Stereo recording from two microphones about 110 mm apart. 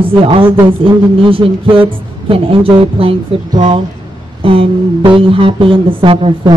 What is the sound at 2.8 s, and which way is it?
Speech, 55° right (ahead or behind).